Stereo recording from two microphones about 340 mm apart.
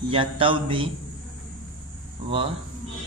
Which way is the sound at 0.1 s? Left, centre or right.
Centre.